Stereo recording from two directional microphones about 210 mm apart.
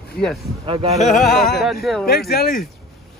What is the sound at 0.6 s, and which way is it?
Speech, 25° right (ahead or behind).